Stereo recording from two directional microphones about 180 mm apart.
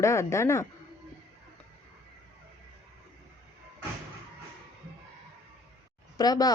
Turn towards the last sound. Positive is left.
turn(degrees=20)  # may be behind; listen again after turning